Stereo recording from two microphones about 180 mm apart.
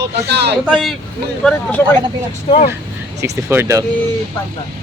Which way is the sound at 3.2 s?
15° right (ahead or behind).